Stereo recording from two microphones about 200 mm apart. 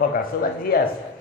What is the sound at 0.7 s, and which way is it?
Speech, 50° left (ahead or behind).